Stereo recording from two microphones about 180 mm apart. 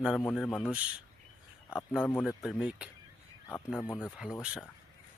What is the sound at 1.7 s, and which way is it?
Speech, 5° right (ahead or behind).